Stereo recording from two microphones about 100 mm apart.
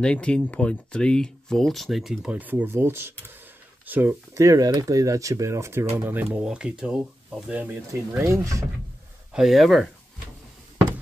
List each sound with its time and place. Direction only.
0.0 s speech: 10° left (ahead or behind)
2.3 s speech: 15° right (ahead or behind)
4.3 s speech: 35° right (ahead or behind)
6.4 s speech: 10° right (ahead or behind)
8.3 s speech: 30° right (ahead or behind)
9.3 s speech: 5° right (ahead or behind)